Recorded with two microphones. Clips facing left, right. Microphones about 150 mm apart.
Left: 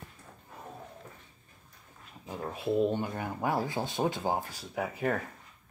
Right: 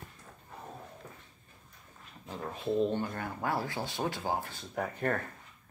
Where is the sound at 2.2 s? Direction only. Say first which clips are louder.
Left 2 dB; 10° left (ahead or behind).